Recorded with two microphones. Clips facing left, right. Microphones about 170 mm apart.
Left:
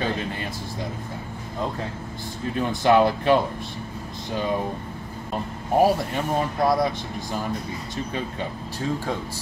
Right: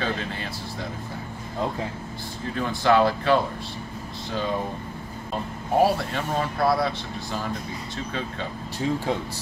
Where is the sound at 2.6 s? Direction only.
15° left (ahead or behind).